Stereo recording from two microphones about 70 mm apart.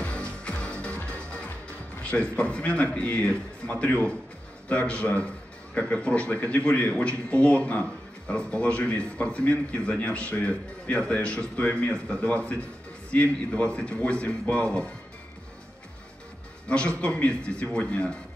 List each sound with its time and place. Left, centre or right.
0.0 s music: centre
2.0 s a man's voice: centre
16.6 s a man's voice: centre